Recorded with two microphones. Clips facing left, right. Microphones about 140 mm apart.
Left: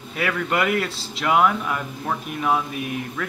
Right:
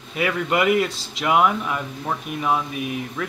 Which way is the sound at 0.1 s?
10° right (ahead or behind).